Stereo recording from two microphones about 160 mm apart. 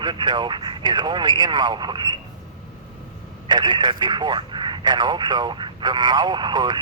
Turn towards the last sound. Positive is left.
turn(degrees=-30)  # may be behind; listen again after turning